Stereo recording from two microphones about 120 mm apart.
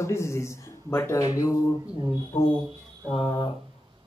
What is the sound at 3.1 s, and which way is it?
Speech, 40° left (ahead or behind).